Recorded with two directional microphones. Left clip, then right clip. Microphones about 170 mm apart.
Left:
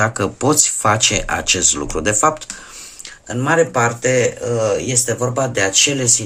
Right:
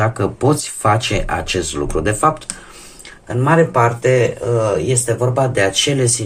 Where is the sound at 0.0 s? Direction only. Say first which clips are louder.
Even; 25° left (ahead or behind).